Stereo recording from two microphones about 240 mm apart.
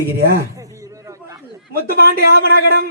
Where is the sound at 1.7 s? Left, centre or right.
Right.